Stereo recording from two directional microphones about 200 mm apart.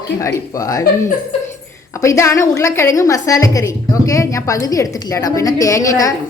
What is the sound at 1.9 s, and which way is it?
A woman's voice, 15° left (ahead or behind).